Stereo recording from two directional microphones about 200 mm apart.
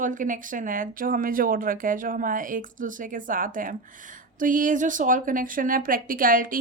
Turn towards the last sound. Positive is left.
turn(degrees=-45)  # may be behind; listen again after turning